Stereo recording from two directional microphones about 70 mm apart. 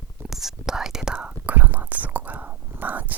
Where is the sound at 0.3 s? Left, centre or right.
Centre.